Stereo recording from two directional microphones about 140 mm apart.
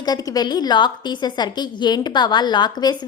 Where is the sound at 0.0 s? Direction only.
25° left (ahead or behind).